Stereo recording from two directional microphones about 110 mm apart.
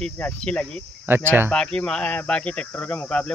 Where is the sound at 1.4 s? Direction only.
10° left (ahead or behind).